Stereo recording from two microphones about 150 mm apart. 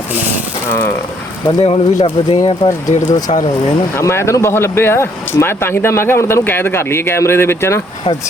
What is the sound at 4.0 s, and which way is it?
Speech, 20° left (ahead or behind).